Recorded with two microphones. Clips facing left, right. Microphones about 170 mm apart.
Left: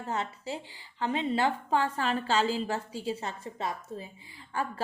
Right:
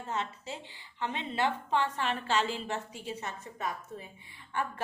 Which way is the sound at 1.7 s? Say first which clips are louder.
Left 3 dB; 35° left (ahead or behind).